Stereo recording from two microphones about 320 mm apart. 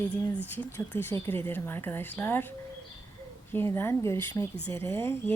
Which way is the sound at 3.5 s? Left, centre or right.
Centre.